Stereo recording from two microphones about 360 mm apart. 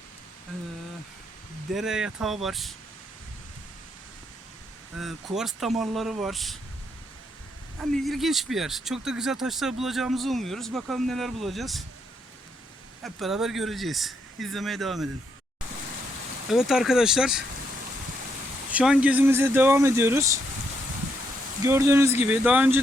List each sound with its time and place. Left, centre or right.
1.7 s speech: centre
4.9 s speech: centre
7.8 s speech: centre
13.0 s speech: centre
16.5 s speech: centre
18.7 s speech: centre
21.6 s speech: centre